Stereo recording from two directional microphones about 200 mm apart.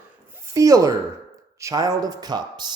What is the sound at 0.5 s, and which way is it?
Speech, 15° right (ahead or behind).